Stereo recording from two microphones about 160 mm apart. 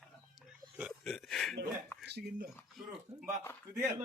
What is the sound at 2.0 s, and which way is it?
Speech, 90° right.